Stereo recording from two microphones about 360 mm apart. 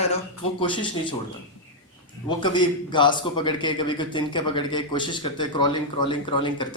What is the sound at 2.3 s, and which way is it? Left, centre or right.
A man's voice, centre.